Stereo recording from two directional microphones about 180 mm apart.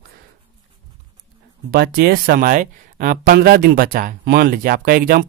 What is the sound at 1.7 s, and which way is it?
Speech, 60° right (ahead or behind).